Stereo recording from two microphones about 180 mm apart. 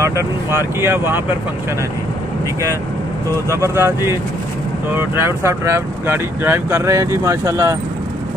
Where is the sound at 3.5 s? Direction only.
15° right (ahead or behind).